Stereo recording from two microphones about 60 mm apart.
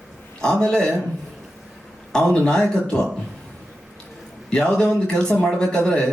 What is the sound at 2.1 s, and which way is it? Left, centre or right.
Speech, centre.